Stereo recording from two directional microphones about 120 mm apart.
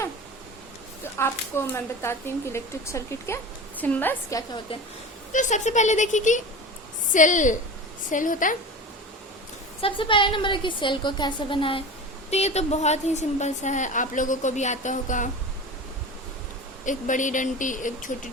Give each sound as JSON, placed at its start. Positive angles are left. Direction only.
{"t": 1.2, "sound": "speech", "side_deg": 20}
{"t": 4.7, "sound": "a woman's voice", "side_deg": 50}
{"t": 5.3, "sound": "speech", "side_deg": 90}
{"t": 9.8, "sound": "a woman's voice", "side_deg": 45}
{"t": 12.3, "sound": "a woman's voice", "side_deg": 65}
{"t": 16.8, "sound": "speech", "side_deg": 90}